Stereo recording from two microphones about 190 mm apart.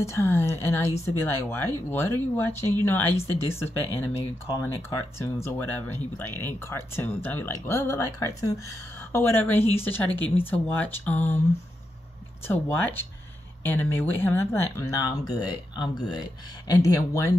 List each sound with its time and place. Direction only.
0.0 s speech: 15° left (ahead or behind)
12.4 s speech: 10° left (ahead or behind)